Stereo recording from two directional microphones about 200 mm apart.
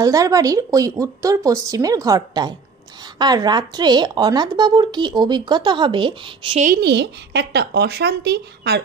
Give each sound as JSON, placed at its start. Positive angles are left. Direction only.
{"t": 0.0, "sound": "speech", "side_deg": -15}
{"t": 6.6, "sound": "speech", "side_deg": -50}